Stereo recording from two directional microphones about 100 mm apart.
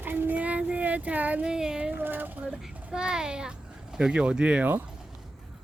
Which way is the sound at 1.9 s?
20° right (ahead or behind).